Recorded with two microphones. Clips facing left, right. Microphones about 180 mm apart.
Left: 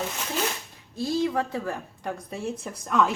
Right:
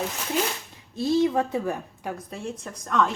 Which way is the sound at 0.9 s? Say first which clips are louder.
Right 4 dB; 20° right (ahead or behind).